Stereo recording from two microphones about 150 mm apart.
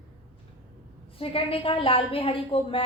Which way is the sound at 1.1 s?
40° left (ahead or behind).